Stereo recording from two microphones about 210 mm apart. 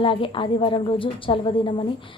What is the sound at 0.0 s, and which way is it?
Speech, 25° left (ahead or behind).